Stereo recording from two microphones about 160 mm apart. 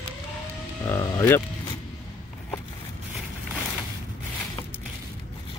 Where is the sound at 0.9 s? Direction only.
20° left (ahead or behind).